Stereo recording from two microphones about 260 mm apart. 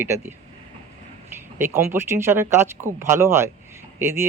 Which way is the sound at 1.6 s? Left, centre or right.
Centre.